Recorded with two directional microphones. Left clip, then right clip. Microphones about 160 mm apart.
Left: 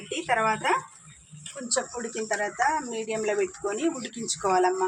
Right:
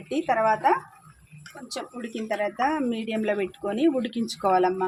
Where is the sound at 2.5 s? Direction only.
90° right.